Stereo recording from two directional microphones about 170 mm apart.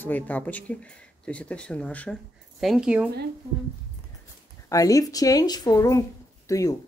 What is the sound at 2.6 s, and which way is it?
Speech, centre (ahead or behind).